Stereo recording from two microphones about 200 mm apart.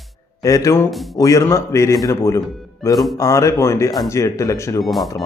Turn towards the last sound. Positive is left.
turn(degrees=0)  # may be behind; listen again after turning